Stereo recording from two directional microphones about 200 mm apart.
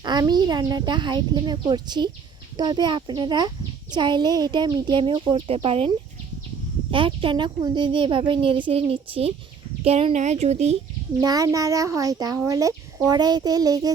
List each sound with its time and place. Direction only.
0.0 s a child's voice: 20° right (ahead or behind)
6.9 s a child's voice: 25° right (ahead or behind)
11.2 s a child's voice: 20° right (ahead or behind)